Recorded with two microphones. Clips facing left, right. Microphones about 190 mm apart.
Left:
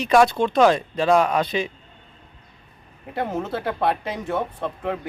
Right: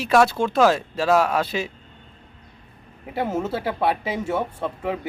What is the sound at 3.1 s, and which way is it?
Speech, 5° right (ahead or behind).